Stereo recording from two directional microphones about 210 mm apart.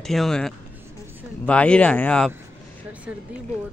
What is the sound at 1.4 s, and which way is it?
Speech, 5° left (ahead or behind).